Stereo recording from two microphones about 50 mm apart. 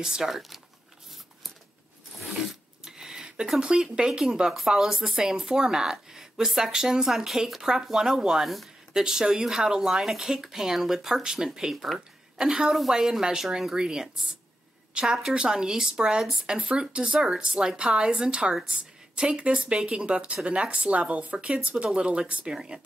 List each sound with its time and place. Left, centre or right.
0.0 s speech: centre
2.1 s zipper: centre
2.8 s a woman's voice: centre